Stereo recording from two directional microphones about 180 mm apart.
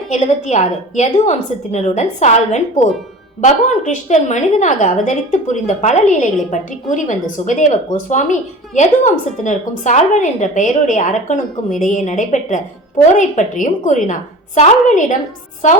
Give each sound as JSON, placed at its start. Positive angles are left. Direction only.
{"t": 0.1, "sound": "a woman's voice", "side_deg": 40}